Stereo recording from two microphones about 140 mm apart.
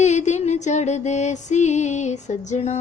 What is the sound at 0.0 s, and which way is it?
Female singing, 55° left (ahead or behind).